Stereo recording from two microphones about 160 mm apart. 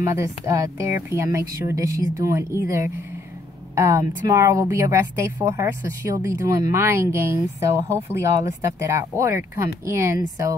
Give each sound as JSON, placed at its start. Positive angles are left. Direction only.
{"t": 0.0, "sound": "speech", "side_deg": -15}